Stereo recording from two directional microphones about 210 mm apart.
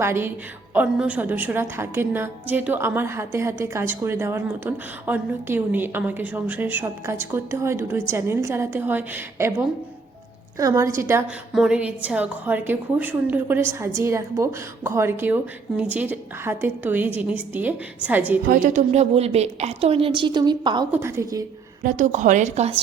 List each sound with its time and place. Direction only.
0.0 s a woman's voice: 10° right (ahead or behind)
18.4 s a woman's voice: 35° right (ahead or behind); by 21.4 s 15° right (ahead or behind)
21.8 s a woman's voice: 35° right (ahead or behind)